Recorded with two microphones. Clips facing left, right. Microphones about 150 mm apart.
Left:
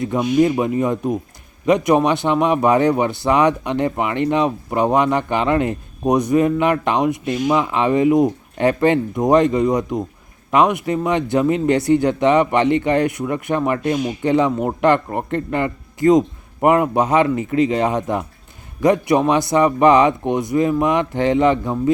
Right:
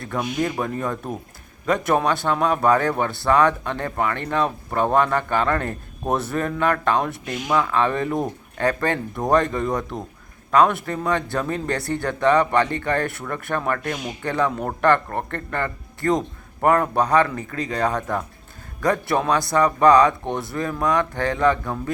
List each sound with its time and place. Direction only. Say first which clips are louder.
0.0 s a man's voice: left 9 dB; 20° left (ahead or behind)